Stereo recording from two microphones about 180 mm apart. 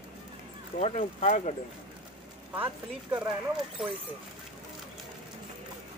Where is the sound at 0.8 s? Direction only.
35° left (ahead or behind).